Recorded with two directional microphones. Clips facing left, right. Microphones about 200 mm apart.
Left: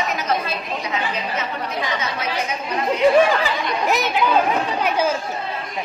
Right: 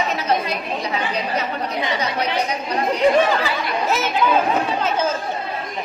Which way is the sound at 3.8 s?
15° left (ahead or behind).